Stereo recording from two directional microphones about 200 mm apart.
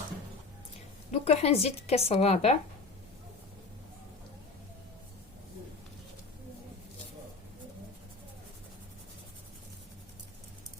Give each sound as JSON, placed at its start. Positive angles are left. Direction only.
{"t": 1.2, "sound": "speech", "side_deg": 30}